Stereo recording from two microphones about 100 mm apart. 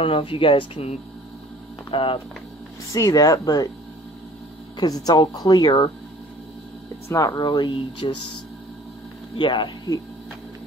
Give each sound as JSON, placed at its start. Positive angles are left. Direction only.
{"t": 0.0, "sound": "speech", "side_deg": 65}
{"t": 1.9, "sound": "speech", "side_deg": 55}
{"t": 2.9, "sound": "speech", "side_deg": 35}
{"t": 4.7, "sound": "speech", "side_deg": 40}
{"t": 7.1, "sound": "speech", "side_deg": 35}
{"t": 9.4, "sound": "speech", "side_deg": 50}